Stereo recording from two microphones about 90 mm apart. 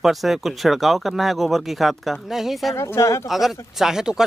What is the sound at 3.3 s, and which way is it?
Speech, 5° right (ahead or behind).